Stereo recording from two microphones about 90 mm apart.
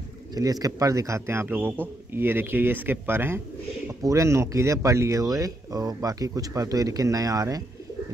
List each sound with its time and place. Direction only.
0.3 s a man's voice: 45° right (ahead or behind); by 3.3 s 25° right (ahead or behind)
4.0 s speech: 35° right (ahead or behind)